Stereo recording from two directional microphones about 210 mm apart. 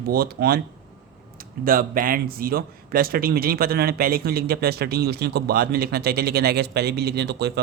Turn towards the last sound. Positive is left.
turn(degrees=-50)  # may be behind; listen again after turning